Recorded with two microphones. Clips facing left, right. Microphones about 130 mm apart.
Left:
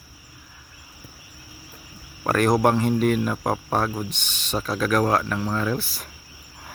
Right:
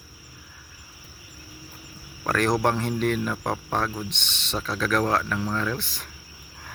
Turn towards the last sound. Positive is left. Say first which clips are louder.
# left 3 dB
turn(degrees=10)  # may be behind; listen again after turning